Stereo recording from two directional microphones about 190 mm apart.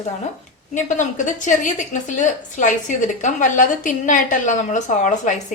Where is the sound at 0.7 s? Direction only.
40° left (ahead or behind).